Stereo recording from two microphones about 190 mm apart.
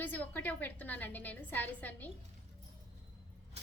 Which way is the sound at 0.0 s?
10° left (ahead or behind).